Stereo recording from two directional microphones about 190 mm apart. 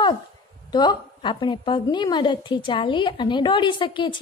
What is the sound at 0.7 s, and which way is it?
A woman's voice, 25° left (ahead or behind).